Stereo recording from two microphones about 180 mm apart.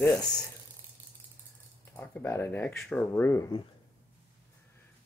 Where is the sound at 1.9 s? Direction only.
15° left (ahead or behind).